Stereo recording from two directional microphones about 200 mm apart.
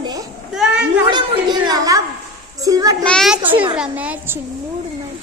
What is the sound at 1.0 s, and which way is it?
A woman's voice, 20° right (ahead or behind).